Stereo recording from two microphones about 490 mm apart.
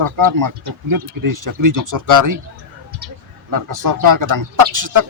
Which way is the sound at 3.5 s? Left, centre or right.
Right.